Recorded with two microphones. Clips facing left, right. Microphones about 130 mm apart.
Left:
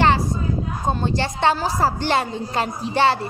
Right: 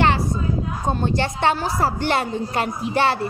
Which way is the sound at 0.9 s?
25° left (ahead or behind).